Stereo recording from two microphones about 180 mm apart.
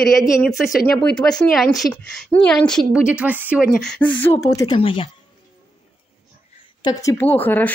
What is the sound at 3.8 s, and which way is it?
Speech, 5° left (ahead or behind).